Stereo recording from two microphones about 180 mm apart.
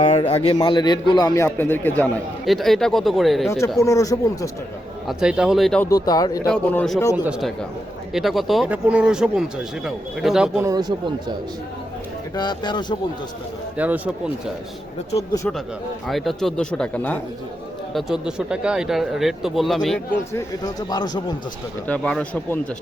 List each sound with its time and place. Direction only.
0.0 s speech: 35° left (ahead or behind)
1.5 s speech: 10° left (ahead or behind)
3.8 s speech: 20° left (ahead or behind)
5.0 s speech: 5° right (ahead or behind)
5.8 s speech: 20° left (ahead or behind)
6.5 s speech: 5° left (ahead or behind)
10.7 s speech: 20° right (ahead or behind)
12.3 s speech: 25° left (ahead or behind)
13.7 s speech: 10° right (ahead or behind)
16.0 s speech: centre (ahead or behind)
17.9 s speech: 5° right (ahead or behind)
20.3 s speech: 20° left (ahead or behind)
21.8 s speech: 5° left (ahead or behind)